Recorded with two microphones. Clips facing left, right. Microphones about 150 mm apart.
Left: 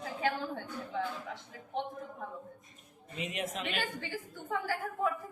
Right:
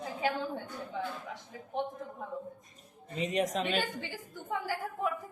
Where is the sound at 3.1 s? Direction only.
35° right (ahead or behind).